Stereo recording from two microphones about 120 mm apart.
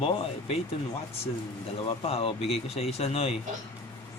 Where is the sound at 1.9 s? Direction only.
50° left (ahead or behind).